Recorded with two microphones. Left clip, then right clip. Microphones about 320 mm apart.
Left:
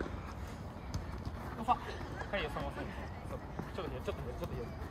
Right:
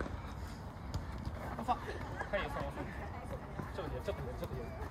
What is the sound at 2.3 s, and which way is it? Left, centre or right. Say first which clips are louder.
Speech: even; centre.